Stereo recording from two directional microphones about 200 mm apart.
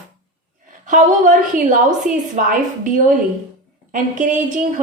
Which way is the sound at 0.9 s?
40° right (ahead or behind).